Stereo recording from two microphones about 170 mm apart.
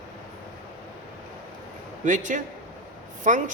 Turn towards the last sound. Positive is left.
turn(degrees=-45)  # may be behind; listen again after turning